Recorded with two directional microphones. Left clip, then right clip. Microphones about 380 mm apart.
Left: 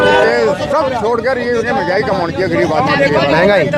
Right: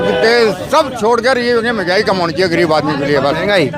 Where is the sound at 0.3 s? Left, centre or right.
Right.